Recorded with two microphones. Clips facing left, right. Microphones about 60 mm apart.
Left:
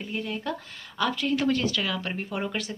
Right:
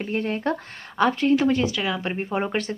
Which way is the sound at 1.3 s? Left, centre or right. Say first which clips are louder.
Right 4 dB; right.